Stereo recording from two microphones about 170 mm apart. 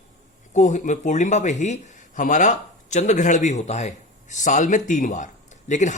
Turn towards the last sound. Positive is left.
turn(degrees=45)  # may be behind; listen again after turning